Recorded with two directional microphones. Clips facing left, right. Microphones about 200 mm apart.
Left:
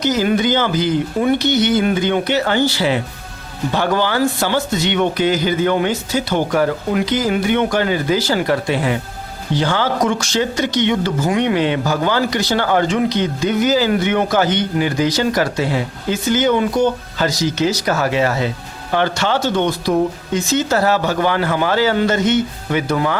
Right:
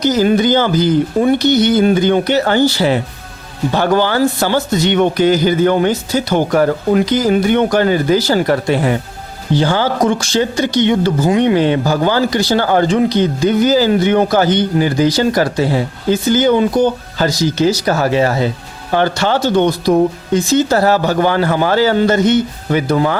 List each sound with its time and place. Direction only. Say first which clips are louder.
0.0 s speech: right 4 dB; 35° right (ahead or behind)
9.6 s speech: right 3 dB; 35° right (ahead or behind)